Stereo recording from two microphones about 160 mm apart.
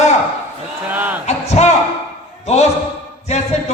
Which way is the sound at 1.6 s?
45° left (ahead or behind).